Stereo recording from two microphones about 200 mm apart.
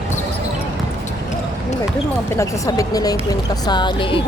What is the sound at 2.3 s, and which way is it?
A woman's voice, 15° left (ahead or behind).